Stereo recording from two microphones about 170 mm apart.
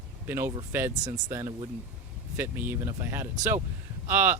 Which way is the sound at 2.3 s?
10° right (ahead or behind).